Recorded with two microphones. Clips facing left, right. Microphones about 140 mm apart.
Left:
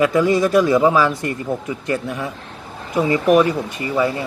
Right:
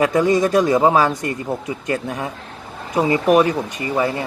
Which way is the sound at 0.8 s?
35° right (ahead or behind).